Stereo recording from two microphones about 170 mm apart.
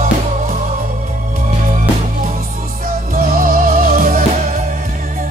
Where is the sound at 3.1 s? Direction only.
55° right (ahead or behind).